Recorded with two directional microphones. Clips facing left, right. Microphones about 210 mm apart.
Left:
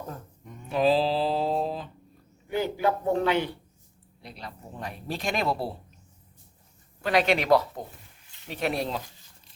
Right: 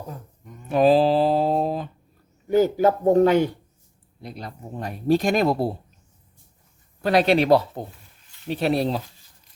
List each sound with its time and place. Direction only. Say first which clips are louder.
0.7 s music: right 6 dB; 50° right (ahead or behind)
2.5 s speech: right 8 dB; 40° right (ahead or behind)
7.0 s speech: right 6 dB; 35° right (ahead or behind)